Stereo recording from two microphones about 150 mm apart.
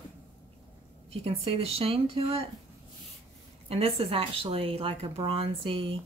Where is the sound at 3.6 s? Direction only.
40° right (ahead or behind).